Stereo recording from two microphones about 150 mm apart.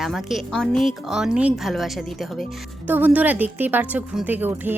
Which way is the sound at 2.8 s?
10° right (ahead or behind).